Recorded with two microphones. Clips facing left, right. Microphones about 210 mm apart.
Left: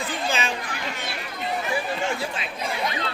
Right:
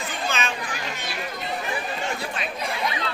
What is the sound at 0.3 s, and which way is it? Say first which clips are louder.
Chatter: left 1 dB; 30° left (ahead or behind).